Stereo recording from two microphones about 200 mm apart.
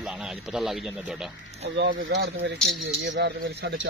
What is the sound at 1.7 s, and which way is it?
Speech, 60° right (ahead or behind).